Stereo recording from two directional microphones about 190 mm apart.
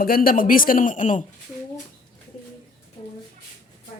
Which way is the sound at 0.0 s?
50° left (ahead or behind).